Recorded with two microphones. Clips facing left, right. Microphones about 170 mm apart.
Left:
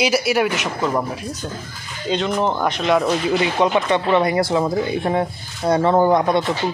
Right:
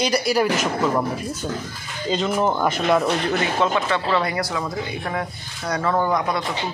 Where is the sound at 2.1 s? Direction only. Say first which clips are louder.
Left 1 dB; 5° right (ahead or behind).